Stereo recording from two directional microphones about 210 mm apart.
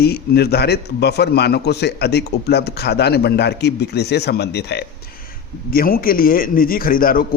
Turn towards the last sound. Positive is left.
turn(degrees=45)  # may be behind; listen again after turning